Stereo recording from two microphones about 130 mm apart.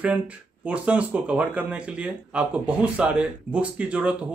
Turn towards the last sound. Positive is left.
turn(degrees=-10)  # may be behind; listen again after turning